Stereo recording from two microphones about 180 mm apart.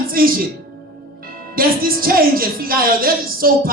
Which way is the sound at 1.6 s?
55° right (ahead or behind).